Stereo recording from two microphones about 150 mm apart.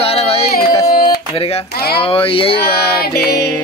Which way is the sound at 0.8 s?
65° left (ahead or behind).